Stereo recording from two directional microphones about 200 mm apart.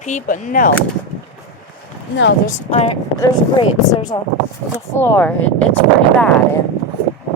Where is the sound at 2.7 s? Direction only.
30° left (ahead or behind); by 5.3 s 10° left (ahead or behind).